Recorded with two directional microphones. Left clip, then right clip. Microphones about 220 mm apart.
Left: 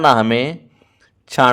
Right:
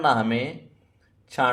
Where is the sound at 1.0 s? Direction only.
45° left (ahead or behind).